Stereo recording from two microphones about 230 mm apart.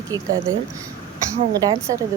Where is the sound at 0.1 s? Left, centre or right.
Centre.